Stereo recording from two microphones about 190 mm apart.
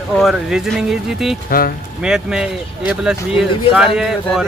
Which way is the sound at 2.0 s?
5° right (ahead or behind).